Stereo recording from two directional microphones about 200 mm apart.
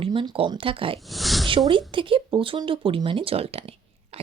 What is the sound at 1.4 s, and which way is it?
Speech, 25° right (ahead or behind).